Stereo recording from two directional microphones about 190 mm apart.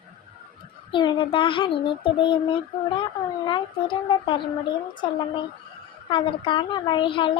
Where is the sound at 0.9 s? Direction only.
25° left (ahead or behind).